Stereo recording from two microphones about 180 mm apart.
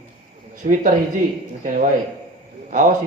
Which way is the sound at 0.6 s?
45° right (ahead or behind).